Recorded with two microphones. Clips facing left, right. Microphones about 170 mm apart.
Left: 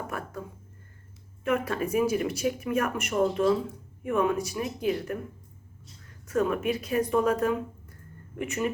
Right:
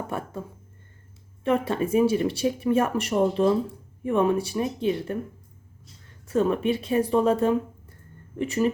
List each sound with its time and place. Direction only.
0.1 s speech: 25° right (ahead or behind)
1.5 s speech: 30° right (ahead or behind)
6.2 s speech: 30° right (ahead or behind)